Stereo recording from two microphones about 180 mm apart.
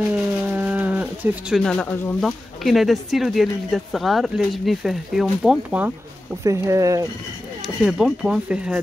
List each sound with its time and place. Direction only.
0.1 s a sound: 10° right (ahead or behind)
1.6 s speech: 5° left (ahead or behind); by 7.1 s 20° right (ahead or behind)
7.6 s speech: 5° right (ahead or behind)